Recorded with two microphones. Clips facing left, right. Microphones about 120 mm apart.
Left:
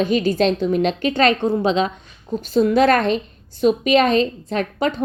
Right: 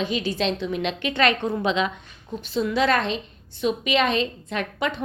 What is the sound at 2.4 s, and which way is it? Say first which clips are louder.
A woman's voice: left 7 dB; 45° left (ahead or behind).